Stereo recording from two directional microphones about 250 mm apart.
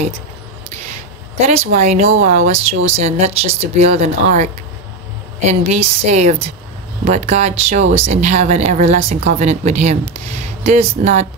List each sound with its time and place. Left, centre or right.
1.5 s speech: right